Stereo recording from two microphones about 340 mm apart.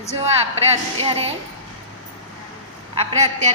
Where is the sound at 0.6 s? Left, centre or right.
Centre.